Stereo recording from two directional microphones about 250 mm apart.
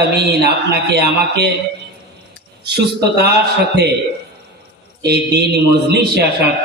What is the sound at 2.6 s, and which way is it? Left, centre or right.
Speech, right.